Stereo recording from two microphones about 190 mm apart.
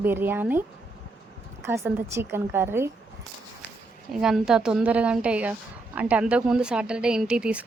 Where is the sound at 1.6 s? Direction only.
15° right (ahead or behind).